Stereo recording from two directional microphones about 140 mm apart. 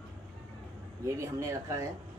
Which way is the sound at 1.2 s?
20° right (ahead or behind).